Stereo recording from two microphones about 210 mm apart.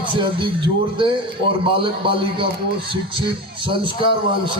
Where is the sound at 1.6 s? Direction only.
25° right (ahead or behind).